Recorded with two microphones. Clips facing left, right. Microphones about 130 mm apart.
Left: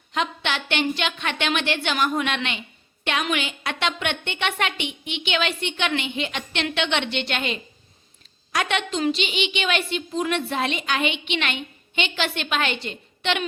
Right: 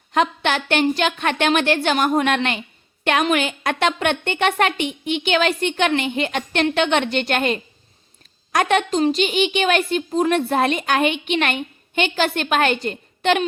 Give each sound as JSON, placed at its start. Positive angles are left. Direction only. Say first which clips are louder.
{"t": 0.1, "sound": "a woman's voice", "louder": "right 7 dB", "side_deg": -50}